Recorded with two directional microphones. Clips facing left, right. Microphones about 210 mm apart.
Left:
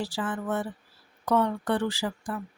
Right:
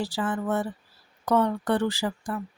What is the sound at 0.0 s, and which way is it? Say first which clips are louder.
Speech: right 3 dB; 40° right (ahead or behind).